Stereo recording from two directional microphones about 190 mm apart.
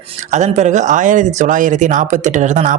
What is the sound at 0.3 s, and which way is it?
Speech, 40° right (ahead or behind).